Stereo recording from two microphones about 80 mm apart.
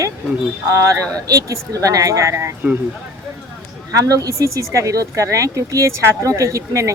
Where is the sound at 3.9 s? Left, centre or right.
Right.